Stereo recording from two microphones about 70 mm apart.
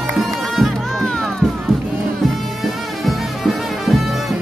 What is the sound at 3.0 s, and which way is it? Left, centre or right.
Music, centre.